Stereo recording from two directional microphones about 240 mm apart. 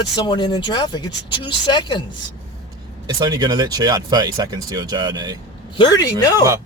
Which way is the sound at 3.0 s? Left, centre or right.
Centre.